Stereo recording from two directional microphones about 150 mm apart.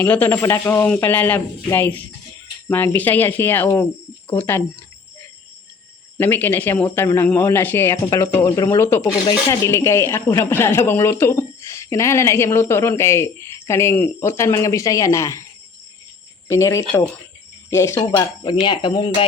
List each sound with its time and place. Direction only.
0.0 s speech: 15° left (ahead or behind)
6.1 s speech: 15° left (ahead or behind)
16.5 s speech: 20° left (ahead or behind)
18.1 s speech: 30° left (ahead or behind)